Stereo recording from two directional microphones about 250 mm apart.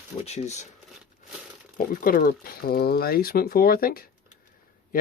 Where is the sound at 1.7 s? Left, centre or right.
Left.